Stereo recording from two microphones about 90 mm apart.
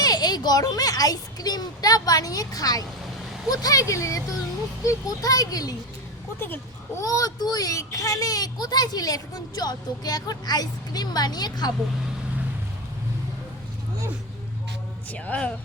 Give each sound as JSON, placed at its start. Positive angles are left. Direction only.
{"t": 0.0, "sound": "a child's voice", "side_deg": 45}
{"t": 7.0, "sound": "a child's voice", "side_deg": 40}
{"t": 15.1, "sound": "a woman's voice", "side_deg": 15}